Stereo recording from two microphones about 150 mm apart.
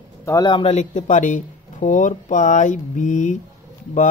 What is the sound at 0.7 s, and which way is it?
Speech, 50° left (ahead or behind).